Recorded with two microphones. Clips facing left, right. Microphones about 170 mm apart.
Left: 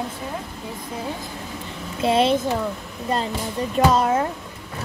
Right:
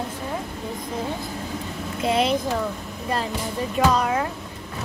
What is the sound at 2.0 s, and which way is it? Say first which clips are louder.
Speech: left 3 dB; 25° left (ahead or behind).